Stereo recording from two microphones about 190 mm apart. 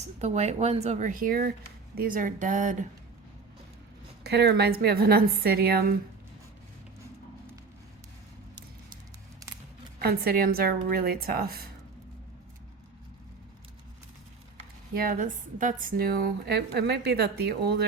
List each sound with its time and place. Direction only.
0.2 s a woman's voice: 35° right (ahead or behind)
4.2 s speech: 60° right (ahead or behind)
10.0 s a woman's voice: 55° right (ahead or behind)
14.9 s speech: 45° right (ahead or behind)